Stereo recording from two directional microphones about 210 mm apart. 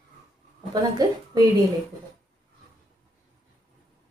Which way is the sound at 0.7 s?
20° right (ahead or behind).